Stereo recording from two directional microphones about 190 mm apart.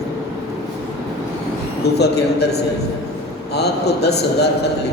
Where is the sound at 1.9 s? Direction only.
60° left (ahead or behind).